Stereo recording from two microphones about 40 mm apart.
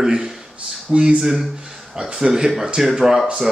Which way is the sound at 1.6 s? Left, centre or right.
Centre.